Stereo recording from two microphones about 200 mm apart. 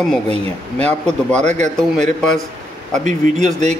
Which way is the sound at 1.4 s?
35° right (ahead or behind).